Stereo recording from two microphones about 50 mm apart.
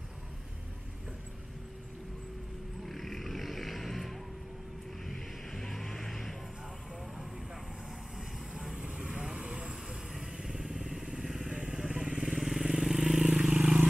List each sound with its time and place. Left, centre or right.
2.8 s vehicle: centre
8.5 s vehicle: centre
10.1 s motorcycle: centre
11.4 s vehicle: centre